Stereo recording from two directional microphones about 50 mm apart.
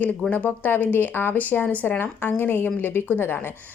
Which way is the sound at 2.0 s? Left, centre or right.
Left.